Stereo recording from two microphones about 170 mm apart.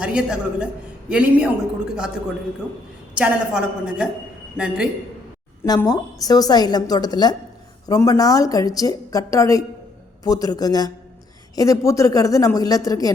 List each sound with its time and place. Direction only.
0.0 s a woman's voice: 5° right (ahead or behind)
2.6 s a man's voice: 5° right (ahead or behind)
5.6 s a woman's voice: 20° left (ahead or behind)